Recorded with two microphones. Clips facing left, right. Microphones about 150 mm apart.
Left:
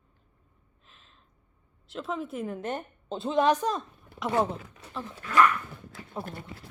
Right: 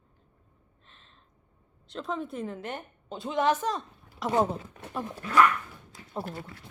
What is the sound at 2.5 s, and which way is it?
A woman's voice, 20° left (ahead or behind).